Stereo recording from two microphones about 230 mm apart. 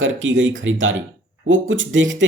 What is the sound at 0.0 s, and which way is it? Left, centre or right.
Speech, right.